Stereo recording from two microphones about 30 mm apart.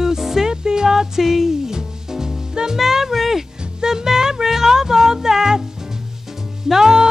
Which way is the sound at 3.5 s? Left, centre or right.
Right.